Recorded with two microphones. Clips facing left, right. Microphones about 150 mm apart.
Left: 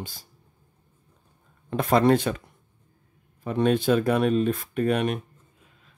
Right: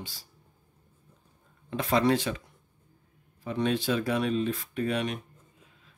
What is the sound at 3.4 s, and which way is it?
Speech, 50° left (ahead or behind).